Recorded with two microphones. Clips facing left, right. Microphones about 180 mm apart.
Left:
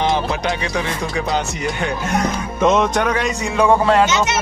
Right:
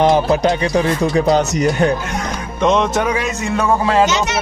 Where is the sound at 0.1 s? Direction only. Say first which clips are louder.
Right 6 dB; 40° right (ahead or behind).